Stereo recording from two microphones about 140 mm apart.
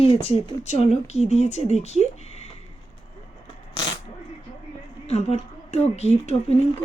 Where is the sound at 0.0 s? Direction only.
50° left (ahead or behind).